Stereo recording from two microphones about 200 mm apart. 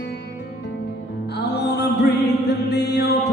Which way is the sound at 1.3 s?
55° left (ahead or behind).